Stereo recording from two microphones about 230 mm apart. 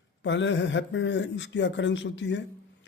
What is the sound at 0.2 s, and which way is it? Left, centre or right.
Speech, left.